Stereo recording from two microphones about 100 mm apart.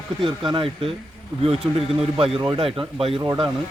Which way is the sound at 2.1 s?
70° right (ahead or behind).